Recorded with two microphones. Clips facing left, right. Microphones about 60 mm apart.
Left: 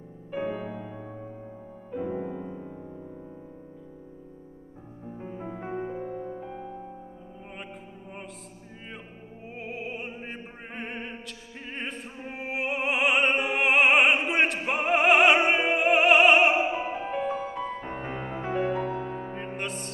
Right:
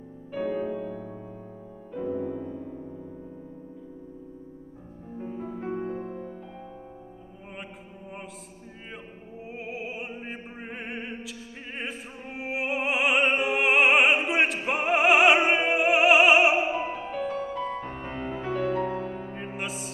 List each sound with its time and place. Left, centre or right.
0.5 s music: centre
5.2 s music: centre
9.5 s opera: centre
17.2 s music: centre
18.4 s music: left; by 19.9 s centre